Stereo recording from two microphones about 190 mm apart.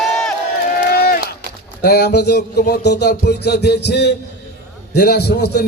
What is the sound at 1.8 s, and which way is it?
Music, 60° left (ahead or behind).